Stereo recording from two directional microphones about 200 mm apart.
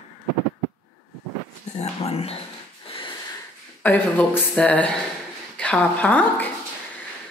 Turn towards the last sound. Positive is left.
turn(degrees=10)  # may be behind; listen again after turning